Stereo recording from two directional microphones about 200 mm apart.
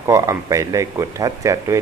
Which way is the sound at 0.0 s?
15° right (ahead or behind).